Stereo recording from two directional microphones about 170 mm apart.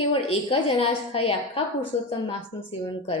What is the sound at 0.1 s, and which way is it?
A woman's voice, 35° left (ahead or behind).